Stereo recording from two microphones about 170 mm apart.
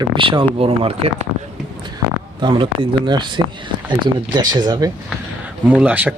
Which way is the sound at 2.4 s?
25° right (ahead or behind).